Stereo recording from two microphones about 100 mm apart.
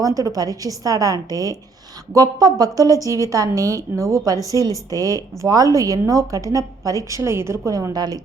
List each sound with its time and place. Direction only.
0.0 s a woman's voice: 35° right (ahead or behind)